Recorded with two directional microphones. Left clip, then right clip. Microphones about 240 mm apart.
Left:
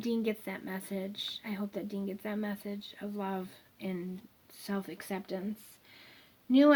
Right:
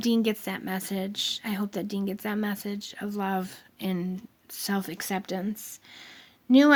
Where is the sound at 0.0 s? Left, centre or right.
Right.